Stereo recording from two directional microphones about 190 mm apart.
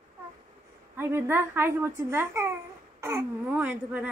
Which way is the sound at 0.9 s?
10° right (ahead or behind).